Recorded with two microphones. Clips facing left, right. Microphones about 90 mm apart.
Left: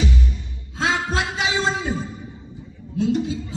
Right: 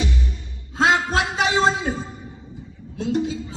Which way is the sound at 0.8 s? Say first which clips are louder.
Right 4 dB; 50° right (ahead or behind).